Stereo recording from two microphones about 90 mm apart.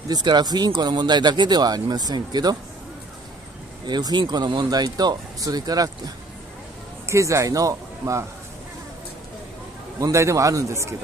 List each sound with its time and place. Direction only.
0.1 s speech: 55° right (ahead or behind)
3.8 s speech: 55° right (ahead or behind)
7.1 s a man's voice: 35° right (ahead or behind)
9.9 s a man's voice: 35° right (ahead or behind)